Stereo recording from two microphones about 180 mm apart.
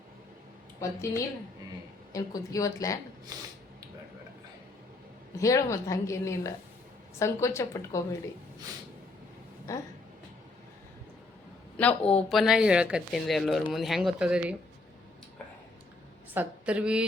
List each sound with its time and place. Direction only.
0.8 s a woman's voice: 15° left (ahead or behind)
2.1 s speech: 20° left (ahead or behind)
5.4 s a woman's voice: 20° left (ahead or behind)
9.7 s a woman's voice: 15° left (ahead or behind)
11.8 s a woman's voice: 10° left (ahead or behind)
16.3 s a woman's voice: 10° right (ahead or behind)